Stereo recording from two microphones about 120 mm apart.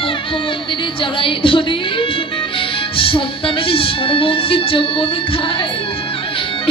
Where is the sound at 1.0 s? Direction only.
45° left (ahead or behind).